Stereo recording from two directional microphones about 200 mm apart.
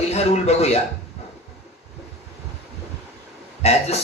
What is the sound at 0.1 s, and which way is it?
Speech, 30° left (ahead or behind).